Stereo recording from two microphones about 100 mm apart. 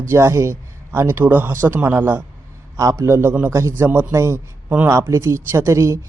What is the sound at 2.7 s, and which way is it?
Speech, 30° right (ahead or behind).